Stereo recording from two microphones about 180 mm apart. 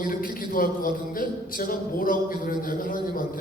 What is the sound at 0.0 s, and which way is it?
A man's voice, 50° left (ahead or behind).